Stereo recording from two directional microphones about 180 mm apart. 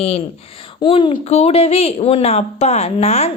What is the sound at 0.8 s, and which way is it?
A woman's voice, 30° left (ahead or behind).